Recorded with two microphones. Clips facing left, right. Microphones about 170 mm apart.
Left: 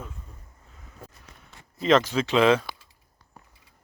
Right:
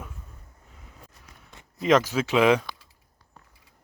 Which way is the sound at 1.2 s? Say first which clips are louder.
Even; 10° right (ahead or behind).